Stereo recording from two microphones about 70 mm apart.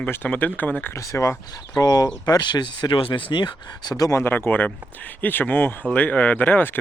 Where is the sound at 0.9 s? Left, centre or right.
Left.